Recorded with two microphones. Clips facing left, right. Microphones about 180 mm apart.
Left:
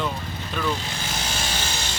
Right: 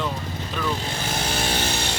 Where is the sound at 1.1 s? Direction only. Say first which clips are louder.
Right 5 dB; 60° right (ahead or behind).